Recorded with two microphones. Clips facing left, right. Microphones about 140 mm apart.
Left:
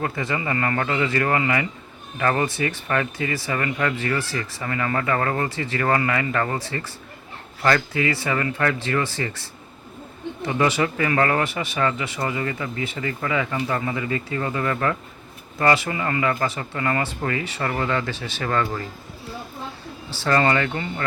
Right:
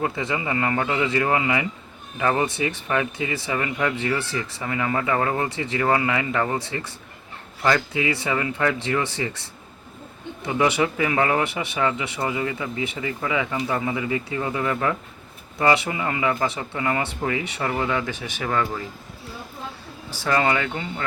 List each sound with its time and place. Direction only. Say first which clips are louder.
0.0 s speech: even; 15° right (ahead or behind)
20.1 s speech: left 2 dB; 10° right (ahead or behind)